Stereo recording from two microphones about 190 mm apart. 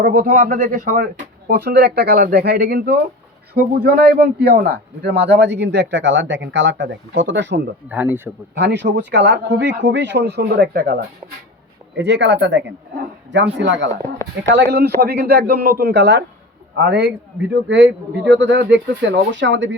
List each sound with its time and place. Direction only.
0.0 s speech: 50° right (ahead or behind)
1.5 s a man's voice: 55° right (ahead or behind)
7.9 s speech: 10° right (ahead or behind)
8.5 s speech: 65° right (ahead or behind); by 10.9 s 50° right (ahead or behind)
11.9 s a man's voice: 65° right (ahead or behind)
14.0 s speech: 15° left (ahead or behind)
14.5 s a man's voice: 60° right (ahead or behind)